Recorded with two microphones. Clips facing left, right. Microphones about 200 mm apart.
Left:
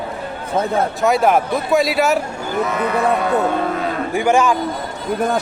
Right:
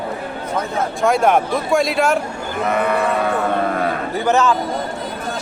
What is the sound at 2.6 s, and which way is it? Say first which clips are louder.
Speech: right 6 dB; 55° right (ahead or behind).